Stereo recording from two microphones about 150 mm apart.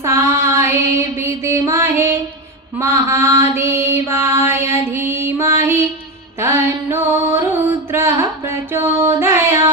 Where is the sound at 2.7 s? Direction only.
20° right (ahead or behind).